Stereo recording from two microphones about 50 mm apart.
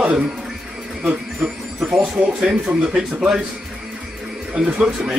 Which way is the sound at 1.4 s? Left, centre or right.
Centre.